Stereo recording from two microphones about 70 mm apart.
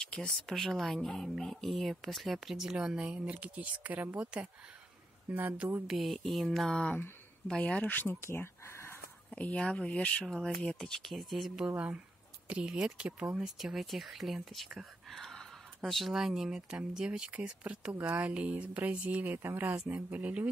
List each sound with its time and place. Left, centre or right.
0.0 s speech: centre; by 4.3 s right
5.3 s speech: right
5.9 s speech: centre; by 8.1 s left
8.1 s a sound: left
9.3 s speech: centre
10.2 s speech: centre
11.6 s speech: centre
13.6 s speech: centre
15.0 s a sound: centre
15.8 s speech: centre; by 20.4 s right